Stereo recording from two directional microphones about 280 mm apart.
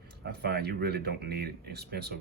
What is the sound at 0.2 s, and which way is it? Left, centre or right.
Speech, right.